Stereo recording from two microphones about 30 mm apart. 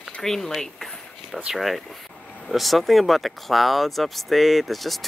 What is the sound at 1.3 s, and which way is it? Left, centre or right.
A woman's voice, centre.